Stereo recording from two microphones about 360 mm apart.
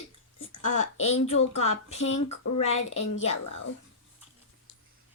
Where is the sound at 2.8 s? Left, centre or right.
Left.